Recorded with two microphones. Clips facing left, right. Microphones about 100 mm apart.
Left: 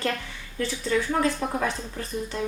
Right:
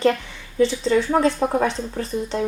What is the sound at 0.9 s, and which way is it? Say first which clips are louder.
Speech: right 6 dB; 35° right (ahead or behind).